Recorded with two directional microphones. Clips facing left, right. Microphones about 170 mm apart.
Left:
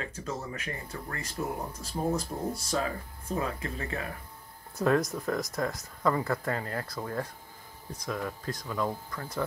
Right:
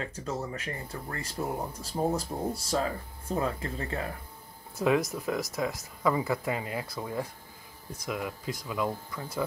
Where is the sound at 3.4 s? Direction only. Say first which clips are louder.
Right 2 dB; 30° right (ahead or behind).